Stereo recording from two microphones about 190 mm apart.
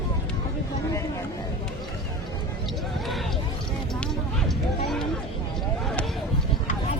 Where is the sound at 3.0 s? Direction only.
Centre (ahead or behind).